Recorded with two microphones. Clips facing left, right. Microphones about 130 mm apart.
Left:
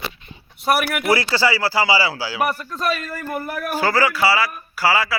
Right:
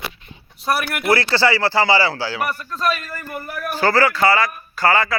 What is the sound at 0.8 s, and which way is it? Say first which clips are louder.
A man's voice: even; 5° left (ahead or behind).